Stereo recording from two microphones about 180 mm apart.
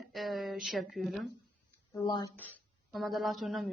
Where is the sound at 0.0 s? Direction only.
Centre (ahead or behind).